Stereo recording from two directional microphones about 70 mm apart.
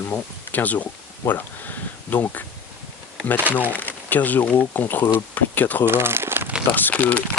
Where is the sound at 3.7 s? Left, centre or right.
Left.